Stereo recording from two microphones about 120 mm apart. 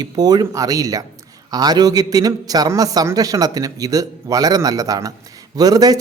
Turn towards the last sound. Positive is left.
turn(degrees=-30)  # may be behind; listen again after turning